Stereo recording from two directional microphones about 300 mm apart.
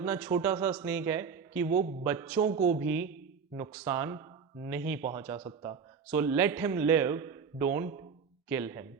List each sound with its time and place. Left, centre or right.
0.0 s speech: centre
2.6 s speech: right
3.6 s speech: centre